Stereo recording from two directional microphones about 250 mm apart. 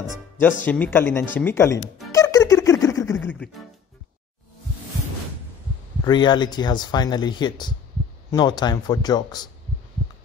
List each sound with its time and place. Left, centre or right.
0.7 s speech: centre
2.1 s a sound: centre
6.0 s speech: centre